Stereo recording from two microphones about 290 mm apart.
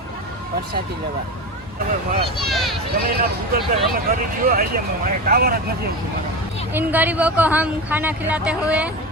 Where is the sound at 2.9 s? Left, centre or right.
Right.